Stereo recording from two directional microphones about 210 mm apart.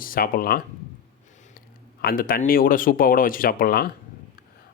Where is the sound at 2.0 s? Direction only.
45° left (ahead or behind).